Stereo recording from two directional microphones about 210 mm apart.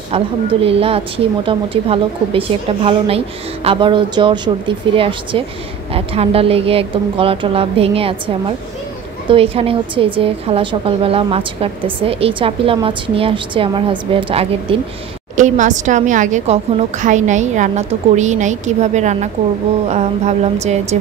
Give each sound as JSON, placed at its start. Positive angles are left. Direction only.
{"t": 0.1, "sound": "a woman's voice", "side_deg": -25}
{"t": 15.3, "sound": "a woman's voice", "side_deg": -35}